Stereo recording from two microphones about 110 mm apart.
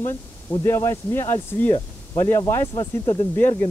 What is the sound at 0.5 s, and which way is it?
Speech, 25° left (ahead or behind).